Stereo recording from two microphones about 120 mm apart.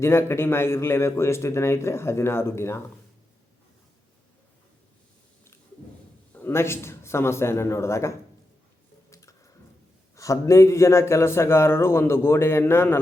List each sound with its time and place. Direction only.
0.0 s a man's voice: 20° left (ahead or behind)
6.3 s a man's voice: 20° left (ahead or behind)
9.0 s a sound: 25° left (ahead or behind)
10.2 s a man's voice: 25° left (ahead or behind)